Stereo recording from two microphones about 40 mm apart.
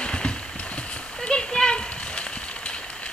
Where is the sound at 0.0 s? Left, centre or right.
Left.